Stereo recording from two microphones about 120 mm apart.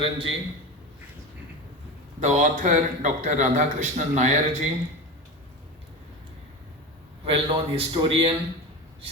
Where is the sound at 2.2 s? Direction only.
90° right; by 4.4 s 70° right (ahead or behind).